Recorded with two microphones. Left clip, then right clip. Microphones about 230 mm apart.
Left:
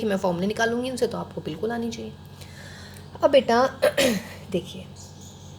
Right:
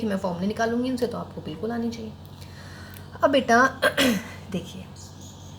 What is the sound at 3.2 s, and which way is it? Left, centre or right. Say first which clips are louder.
A woman's voice: even; left.